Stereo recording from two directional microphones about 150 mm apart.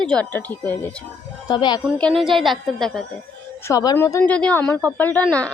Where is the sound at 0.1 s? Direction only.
10° left (ahead or behind).